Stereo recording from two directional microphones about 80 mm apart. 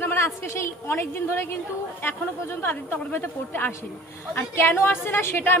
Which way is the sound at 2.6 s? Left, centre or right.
Left.